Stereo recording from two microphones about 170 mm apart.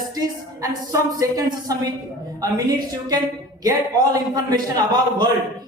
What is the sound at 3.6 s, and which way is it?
A woman's voice, 20° right (ahead or behind).